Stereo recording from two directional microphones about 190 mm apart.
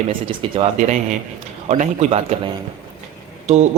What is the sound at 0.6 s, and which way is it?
Speech, 35° right (ahead or behind).